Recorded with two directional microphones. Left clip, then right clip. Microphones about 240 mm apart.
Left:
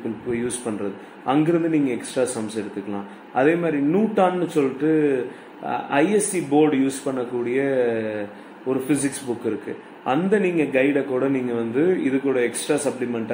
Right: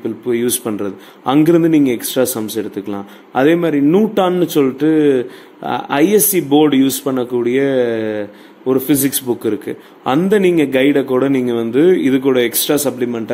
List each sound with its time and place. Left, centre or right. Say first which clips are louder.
0.3 s speech: right 9 dB; right